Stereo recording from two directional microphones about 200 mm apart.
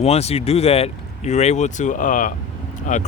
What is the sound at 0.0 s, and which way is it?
Speech, 30° left (ahead or behind).